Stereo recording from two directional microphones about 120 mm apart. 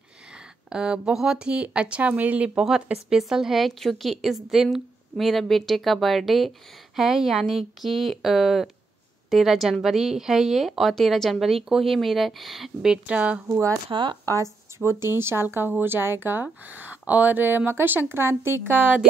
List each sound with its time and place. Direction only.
0.7 s speech: 5° right (ahead or behind)
13.8 s speech: 45° right (ahead or behind)
15.1 s speech: 20° right (ahead or behind)